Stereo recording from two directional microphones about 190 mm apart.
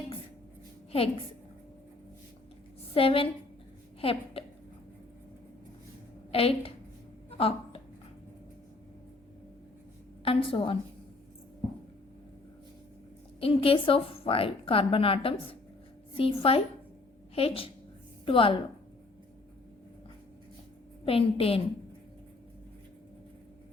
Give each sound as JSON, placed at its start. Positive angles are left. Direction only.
{"t": 0.9, "sound": "a woman's voice", "side_deg": 30}
{"t": 2.9, "sound": "a woman's voice", "side_deg": 30}
{"t": 6.3, "sound": "a woman's voice", "side_deg": 30}
{"t": 7.3, "sound": "a sound", "side_deg": 30}
{"t": 10.2, "sound": "a woman's voice", "side_deg": 30}
{"t": 13.4, "sound": "a woman's voice", "side_deg": 30}
{"t": 21.0, "sound": "a woman's voice", "side_deg": 30}